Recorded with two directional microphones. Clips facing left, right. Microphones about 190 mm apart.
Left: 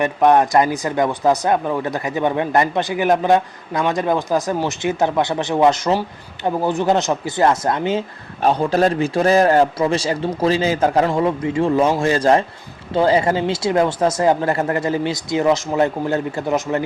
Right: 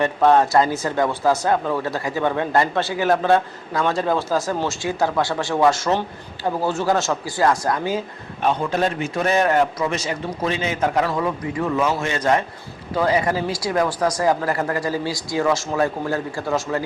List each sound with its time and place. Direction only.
0.0 s speech: 15° left (ahead or behind)
8.4 s a man's voice: 35° left (ahead or behind); by 16.8 s 20° left (ahead or behind)